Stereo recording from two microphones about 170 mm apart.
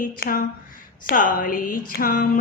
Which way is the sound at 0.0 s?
55° left (ahead or behind).